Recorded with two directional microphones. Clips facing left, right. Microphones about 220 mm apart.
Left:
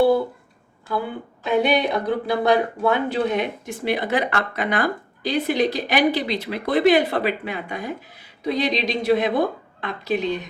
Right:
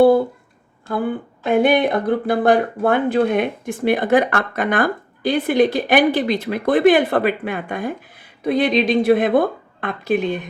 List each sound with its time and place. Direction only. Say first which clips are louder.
0.9 s speech: right 5 dB; 50° right (ahead or behind)